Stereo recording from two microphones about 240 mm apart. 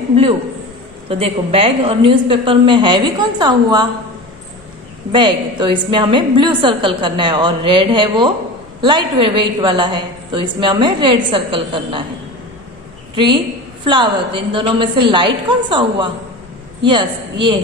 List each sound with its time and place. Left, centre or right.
1.0 s a woman's voice: right
5.1 s a woman's voice: centre
13.1 s a woman's voice: centre